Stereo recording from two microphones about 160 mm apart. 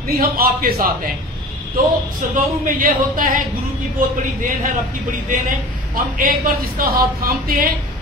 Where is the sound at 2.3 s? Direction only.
60° right (ahead or behind).